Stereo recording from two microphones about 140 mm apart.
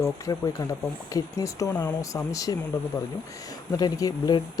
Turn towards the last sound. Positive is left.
turn(degrees=30)  # may be behind; listen again after turning